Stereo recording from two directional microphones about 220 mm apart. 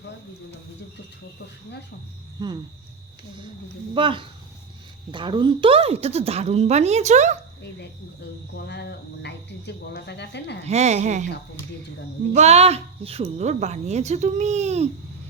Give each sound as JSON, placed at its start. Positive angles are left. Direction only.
{"t": 2.4, "sound": "a woman's voice", "side_deg": -20}
{"t": 3.9, "sound": "a woman's voice", "side_deg": -20}
{"t": 8.5, "sound": "speech", "side_deg": 50}
{"t": 10.7, "sound": "a woman's voice", "side_deg": -30}
{"t": 12.3, "sound": "a woman's voice", "side_deg": -30}